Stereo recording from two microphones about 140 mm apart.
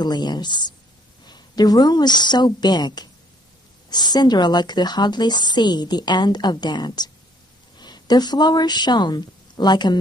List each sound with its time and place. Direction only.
0.0 s a woman's voice: 30° left (ahead or behind)